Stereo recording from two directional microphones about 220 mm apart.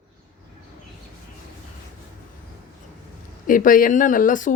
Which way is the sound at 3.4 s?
40° left (ahead or behind).